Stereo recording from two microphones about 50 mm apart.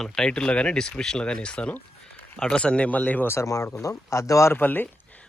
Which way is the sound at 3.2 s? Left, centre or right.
Left.